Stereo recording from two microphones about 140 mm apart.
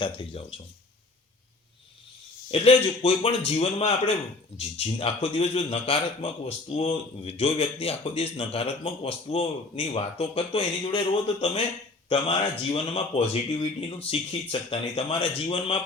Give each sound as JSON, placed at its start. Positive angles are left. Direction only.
{"t": 0.0, "sound": "speech", "side_deg": 40}
{"t": 2.5, "sound": "speech", "side_deg": 45}